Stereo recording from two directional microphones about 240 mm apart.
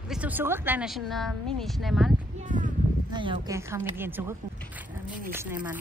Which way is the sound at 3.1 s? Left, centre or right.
Centre.